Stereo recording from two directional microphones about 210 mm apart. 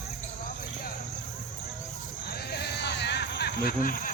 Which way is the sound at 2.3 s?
50° left (ahead or behind).